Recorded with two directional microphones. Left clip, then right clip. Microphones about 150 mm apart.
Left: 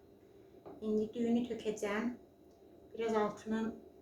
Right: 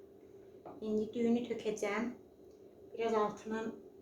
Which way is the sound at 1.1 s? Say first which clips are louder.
Right 1 dB; 25° right (ahead or behind).